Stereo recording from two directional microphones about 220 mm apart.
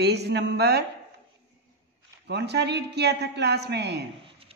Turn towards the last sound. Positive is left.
turn(degrees=-50)  # may be behind; listen again after turning